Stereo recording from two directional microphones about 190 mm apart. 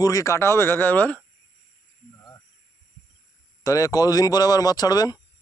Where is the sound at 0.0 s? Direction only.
15° left (ahead or behind).